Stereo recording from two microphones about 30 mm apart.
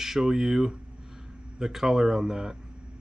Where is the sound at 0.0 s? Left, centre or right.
Centre.